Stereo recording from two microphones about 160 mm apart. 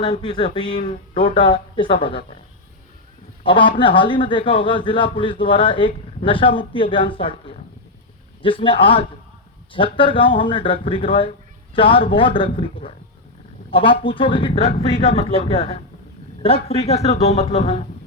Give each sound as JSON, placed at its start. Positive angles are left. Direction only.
{"t": 0.0, "sound": "speech", "side_deg": 30}
{"t": 3.4, "sound": "a man's voice", "side_deg": 30}